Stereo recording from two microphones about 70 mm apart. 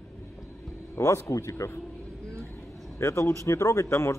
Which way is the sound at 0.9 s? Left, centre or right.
Left.